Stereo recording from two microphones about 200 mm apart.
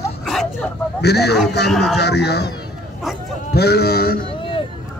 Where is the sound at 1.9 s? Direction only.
55° left (ahead or behind).